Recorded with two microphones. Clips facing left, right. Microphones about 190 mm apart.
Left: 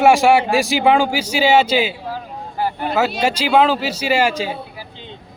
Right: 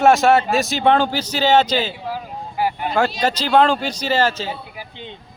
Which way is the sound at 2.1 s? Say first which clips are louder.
Even; 10° right (ahead or behind).